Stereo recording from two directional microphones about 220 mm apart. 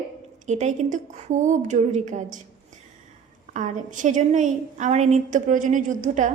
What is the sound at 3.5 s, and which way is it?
A woman's voice, 35° right (ahead or behind).